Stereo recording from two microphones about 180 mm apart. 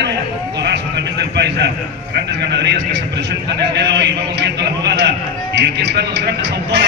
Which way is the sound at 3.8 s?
70° right (ahead or behind).